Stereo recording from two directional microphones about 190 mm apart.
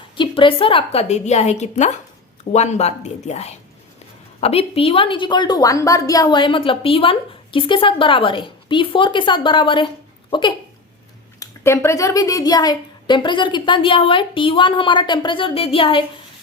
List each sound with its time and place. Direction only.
0.2 s a woman's voice: 25° left (ahead or behind)
11.3 s a woman's voice: 15° left (ahead or behind)